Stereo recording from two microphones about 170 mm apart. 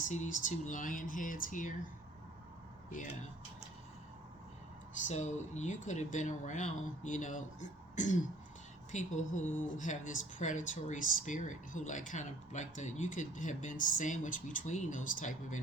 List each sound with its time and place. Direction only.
0.1 s speech: 45° left (ahead or behind)
2.9 s speech: 50° left (ahead or behind)
5.0 s speech: 45° left (ahead or behind)